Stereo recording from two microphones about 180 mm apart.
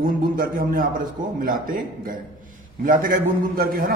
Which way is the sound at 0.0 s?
50° right (ahead or behind).